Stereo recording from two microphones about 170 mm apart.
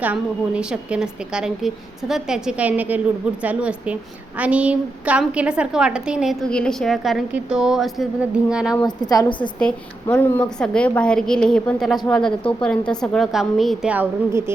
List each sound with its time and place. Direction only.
0.0 s a woman's voice: 10° right (ahead or behind)
8.7 s a woman's voice: 25° left (ahead or behind)
9.6 s a woman's voice: 5° left (ahead or behind); by 14.5 s 15° right (ahead or behind)